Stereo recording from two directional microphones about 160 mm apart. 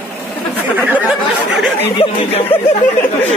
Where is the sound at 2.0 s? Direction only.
40° left (ahead or behind).